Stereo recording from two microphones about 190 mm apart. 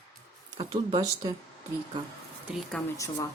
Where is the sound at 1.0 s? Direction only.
20° right (ahead or behind).